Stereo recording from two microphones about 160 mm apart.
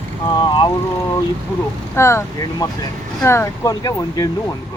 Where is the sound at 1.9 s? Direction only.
15° left (ahead or behind).